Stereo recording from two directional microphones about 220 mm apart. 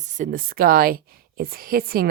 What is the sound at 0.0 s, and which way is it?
A woman's voice, 35° right (ahead or behind).